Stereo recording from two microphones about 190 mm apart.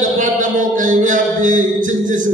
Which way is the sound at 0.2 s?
45° right (ahead or behind).